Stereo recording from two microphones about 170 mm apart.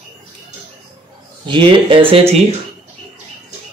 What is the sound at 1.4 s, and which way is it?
Speech, 30° right (ahead or behind).